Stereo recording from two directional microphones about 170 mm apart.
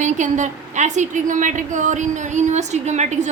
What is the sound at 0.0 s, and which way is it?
A woman's voice, 45° right (ahead or behind).